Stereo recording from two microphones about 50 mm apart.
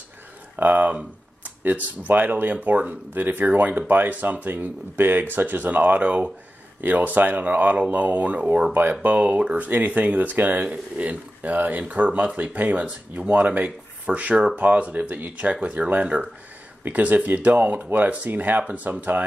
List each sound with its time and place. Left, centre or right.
0.6 s speech: right